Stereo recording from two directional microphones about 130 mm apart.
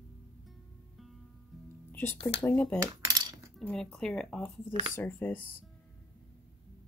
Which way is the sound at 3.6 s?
5° left (ahead or behind).